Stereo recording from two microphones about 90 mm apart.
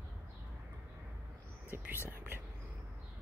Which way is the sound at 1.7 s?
25° right (ahead or behind).